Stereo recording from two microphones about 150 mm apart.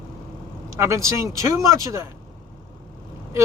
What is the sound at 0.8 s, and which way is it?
Speech, 20° right (ahead or behind).